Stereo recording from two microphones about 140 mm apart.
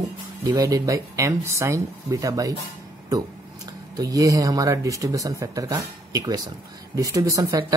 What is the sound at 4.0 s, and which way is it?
Speech, 25° right (ahead or behind).